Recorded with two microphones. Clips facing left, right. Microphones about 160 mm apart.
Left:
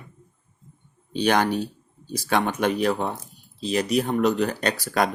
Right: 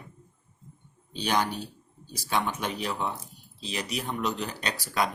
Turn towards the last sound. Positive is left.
turn(degrees=50)  # may be behind; listen again after turning